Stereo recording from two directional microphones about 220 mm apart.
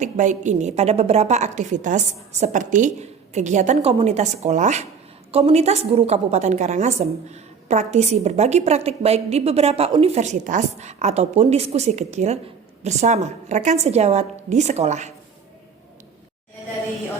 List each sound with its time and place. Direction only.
0.0 s a woman's voice: 35° right (ahead or behind)